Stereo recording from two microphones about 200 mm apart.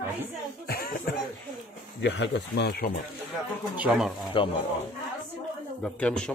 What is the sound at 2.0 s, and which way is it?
Speech, 60° left (ahead or behind).